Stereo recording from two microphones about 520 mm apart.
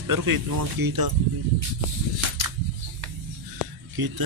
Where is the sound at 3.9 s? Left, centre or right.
Right.